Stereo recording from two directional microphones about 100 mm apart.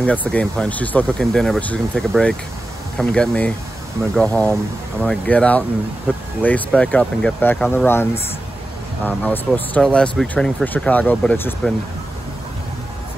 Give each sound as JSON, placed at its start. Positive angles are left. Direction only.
{"t": 0.0, "sound": "speech", "side_deg": 15}
{"t": 1.2, "sound": "speech", "side_deg": 5}